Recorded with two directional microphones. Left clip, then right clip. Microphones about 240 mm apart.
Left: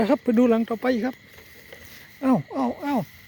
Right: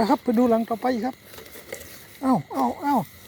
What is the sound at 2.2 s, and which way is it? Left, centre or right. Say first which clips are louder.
Speech: right 1 dB; left.